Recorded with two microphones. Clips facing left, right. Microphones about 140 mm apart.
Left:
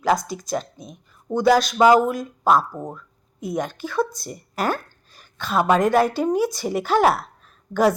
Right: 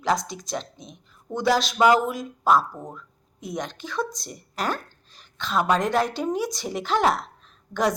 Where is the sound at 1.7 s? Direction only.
30° left (ahead or behind).